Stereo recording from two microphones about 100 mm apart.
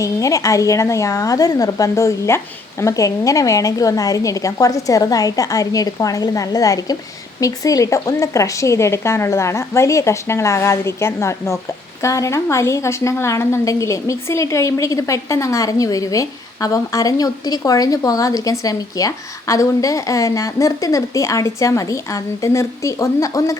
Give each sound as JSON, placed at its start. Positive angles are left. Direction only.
{"t": 0.0, "sound": "a woman's voice", "side_deg": 35}